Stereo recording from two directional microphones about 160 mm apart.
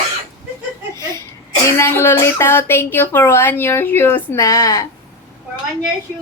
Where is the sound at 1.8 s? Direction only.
15° left (ahead or behind).